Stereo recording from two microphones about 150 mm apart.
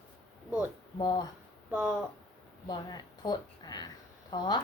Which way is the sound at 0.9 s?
30° left (ahead or behind).